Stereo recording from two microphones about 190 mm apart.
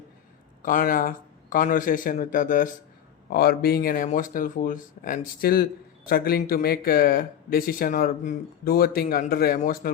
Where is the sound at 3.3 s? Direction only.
55° left (ahead or behind).